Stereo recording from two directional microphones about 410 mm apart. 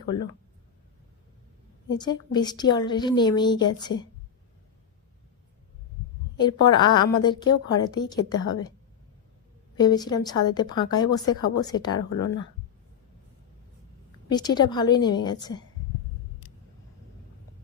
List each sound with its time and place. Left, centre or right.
0.1 s speech: centre
2.0 s speech: centre
6.4 s speech: centre
8.4 s a woman's voice: left
9.7 s speech: centre
11.3 s a woman's voice: left
11.6 s speech: centre
14.3 s speech: centre